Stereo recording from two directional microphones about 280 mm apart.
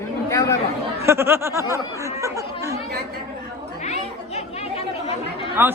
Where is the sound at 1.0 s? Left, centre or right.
Centre.